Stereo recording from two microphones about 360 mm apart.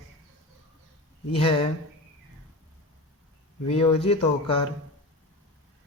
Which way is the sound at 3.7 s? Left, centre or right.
Centre.